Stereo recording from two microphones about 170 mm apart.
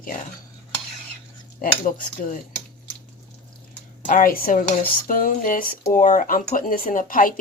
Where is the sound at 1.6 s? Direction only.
55° left (ahead or behind).